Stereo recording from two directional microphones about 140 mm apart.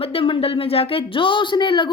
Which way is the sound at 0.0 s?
40° left (ahead or behind).